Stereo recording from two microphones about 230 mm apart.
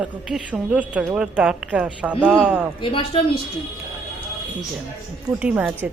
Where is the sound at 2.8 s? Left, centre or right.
Left.